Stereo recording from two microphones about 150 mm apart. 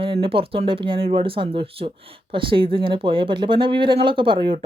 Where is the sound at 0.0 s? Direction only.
35° right (ahead or behind).